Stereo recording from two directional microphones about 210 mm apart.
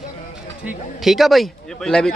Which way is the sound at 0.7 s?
Centre (ahead or behind).